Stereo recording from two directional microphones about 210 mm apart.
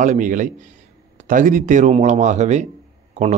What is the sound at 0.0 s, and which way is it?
Speech, 35° right (ahead or behind).